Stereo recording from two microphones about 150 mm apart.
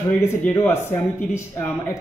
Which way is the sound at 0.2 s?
15° left (ahead or behind).